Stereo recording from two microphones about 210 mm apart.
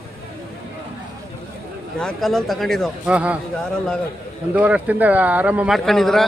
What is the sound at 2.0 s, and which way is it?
Speech, centre (ahead or behind).